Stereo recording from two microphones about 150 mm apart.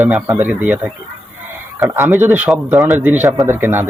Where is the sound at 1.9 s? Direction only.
15° right (ahead or behind).